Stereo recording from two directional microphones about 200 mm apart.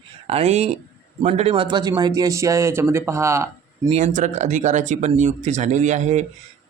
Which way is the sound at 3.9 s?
35° right (ahead or behind).